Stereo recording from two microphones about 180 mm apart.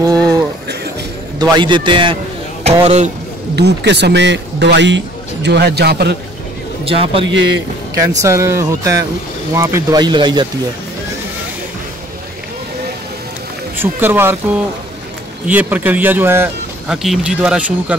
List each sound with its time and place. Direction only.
0.0 s a sound: 20° right (ahead or behind)
1.4 s a man's voice: 25° right (ahead or behind)
3.5 s speech: 70° right (ahead or behind)
6.8 s a man's voice: 30° right (ahead or behind)
7.2 s a man's voice: 90° right
8.2 s speech: 15° right (ahead or behind)
13.7 s speech: 10° right (ahead or behind)